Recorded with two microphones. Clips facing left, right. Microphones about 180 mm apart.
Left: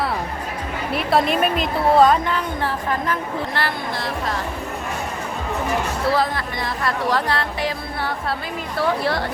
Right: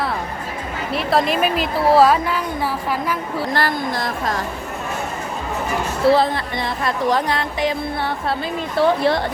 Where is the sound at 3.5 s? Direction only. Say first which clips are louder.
Right 4 dB; 40° right (ahead or behind).